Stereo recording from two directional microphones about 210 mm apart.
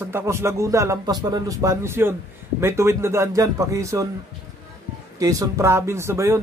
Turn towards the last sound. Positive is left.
turn(degrees=-15)  # may be behind; listen again after turning